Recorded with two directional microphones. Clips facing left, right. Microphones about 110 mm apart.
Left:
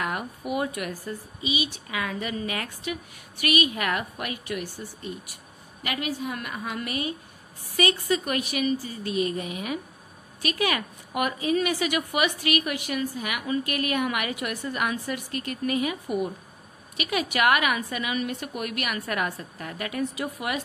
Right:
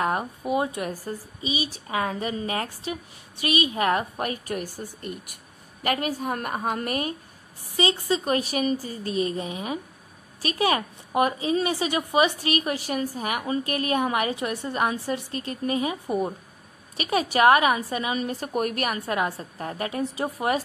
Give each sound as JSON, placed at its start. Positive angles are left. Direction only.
{"t": 0.0, "sound": "a woman's voice", "side_deg": -30}
{"t": 7.7, "sound": "a woman's voice", "side_deg": -25}